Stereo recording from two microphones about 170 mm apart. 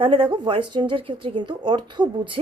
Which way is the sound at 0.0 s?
30° right (ahead or behind).